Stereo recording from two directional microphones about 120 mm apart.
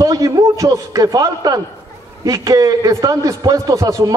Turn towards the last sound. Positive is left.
turn(degrees=-30)  # may be behind; listen again after turning